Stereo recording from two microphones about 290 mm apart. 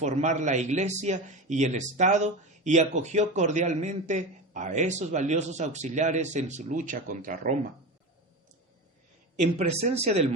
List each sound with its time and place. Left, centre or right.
0.0 s a man's voice: right
9.4 s a man's voice: right